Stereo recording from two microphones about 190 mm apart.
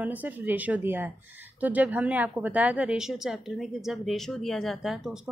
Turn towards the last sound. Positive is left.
turn(degrees=0)  # may be behind; listen again after turning